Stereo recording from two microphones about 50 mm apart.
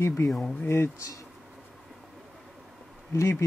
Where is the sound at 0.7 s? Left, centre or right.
Left.